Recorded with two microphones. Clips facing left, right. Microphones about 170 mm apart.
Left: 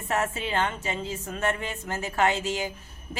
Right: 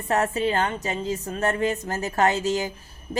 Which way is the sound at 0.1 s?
35° right (ahead or behind).